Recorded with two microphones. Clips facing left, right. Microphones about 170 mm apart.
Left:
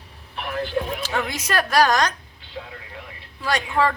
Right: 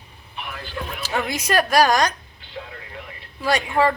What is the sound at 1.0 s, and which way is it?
A woman's voice, 10° right (ahead or behind).